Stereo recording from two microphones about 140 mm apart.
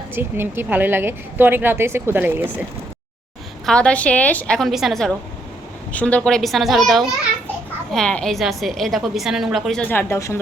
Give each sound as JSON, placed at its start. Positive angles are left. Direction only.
{"t": 0.1, "sound": "speech", "side_deg": -15}
{"t": 3.7, "sound": "a woman's voice", "side_deg": 5}
{"t": 9.8, "sound": "a woman's voice", "side_deg": 15}